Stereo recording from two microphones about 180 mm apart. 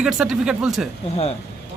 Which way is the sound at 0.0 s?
Centre (ahead or behind).